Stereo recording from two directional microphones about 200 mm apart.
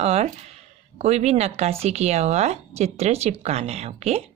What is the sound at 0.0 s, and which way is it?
Speech, 30° right (ahead or behind).